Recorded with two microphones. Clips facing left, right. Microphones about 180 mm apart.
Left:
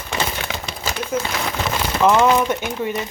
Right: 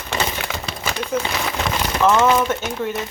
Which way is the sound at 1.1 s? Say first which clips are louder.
Even; 5° left (ahead or behind).